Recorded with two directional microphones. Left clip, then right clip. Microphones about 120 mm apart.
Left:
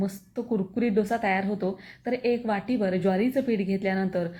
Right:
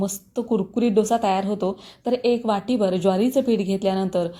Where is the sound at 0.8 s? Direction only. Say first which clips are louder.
Right 6 dB; 15° left (ahead or behind).